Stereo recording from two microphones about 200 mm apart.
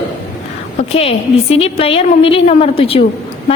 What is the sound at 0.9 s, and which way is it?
A woman's voice, 30° left (ahead or behind).